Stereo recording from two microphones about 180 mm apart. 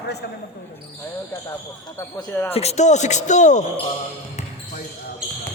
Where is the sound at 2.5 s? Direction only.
35° left (ahead or behind).